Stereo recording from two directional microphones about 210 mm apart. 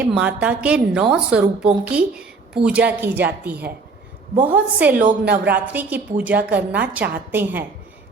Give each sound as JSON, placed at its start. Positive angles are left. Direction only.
{"t": 0.0, "sound": "a woman's voice", "side_deg": -5}
{"t": 4.9, "sound": "a woman's voice", "side_deg": -45}
{"t": 5.5, "sound": "a woman's voice", "side_deg": -5}